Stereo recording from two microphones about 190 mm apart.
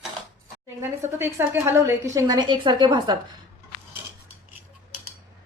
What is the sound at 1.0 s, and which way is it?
A woman's voice, 15° right (ahead or behind).